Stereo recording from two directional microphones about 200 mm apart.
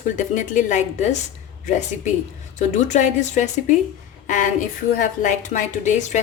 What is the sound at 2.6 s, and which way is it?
A woman's voice, 35° left (ahead or behind).